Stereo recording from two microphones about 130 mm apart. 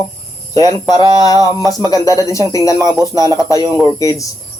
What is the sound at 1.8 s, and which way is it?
Speech, 25° left (ahead or behind).